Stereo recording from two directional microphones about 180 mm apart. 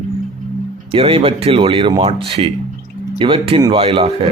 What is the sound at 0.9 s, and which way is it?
Speech, 30° right (ahead or behind).